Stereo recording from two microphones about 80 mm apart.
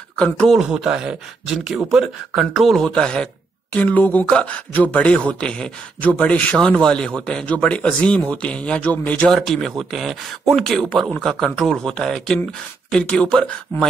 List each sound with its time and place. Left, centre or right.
0.2 s a man's voice: centre
0.6 s a man's voice: centre
9.3 s a man's voice: centre